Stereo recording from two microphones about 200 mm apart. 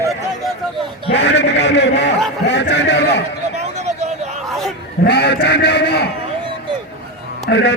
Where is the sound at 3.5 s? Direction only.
35° right (ahead or behind).